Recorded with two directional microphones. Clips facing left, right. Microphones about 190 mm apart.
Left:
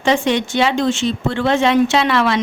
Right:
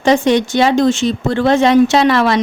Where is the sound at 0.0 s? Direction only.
40° right (ahead or behind).